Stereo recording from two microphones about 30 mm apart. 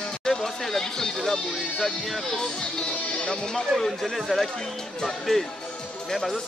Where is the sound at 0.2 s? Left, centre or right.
Centre.